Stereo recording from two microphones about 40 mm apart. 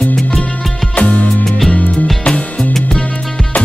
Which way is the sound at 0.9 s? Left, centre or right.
Left.